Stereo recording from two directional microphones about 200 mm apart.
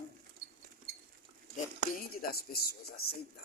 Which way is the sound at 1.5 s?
50° left (ahead or behind).